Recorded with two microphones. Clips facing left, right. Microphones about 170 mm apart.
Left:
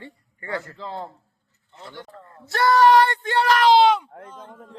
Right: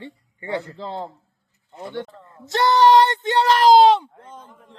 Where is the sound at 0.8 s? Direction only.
30° right (ahead or behind).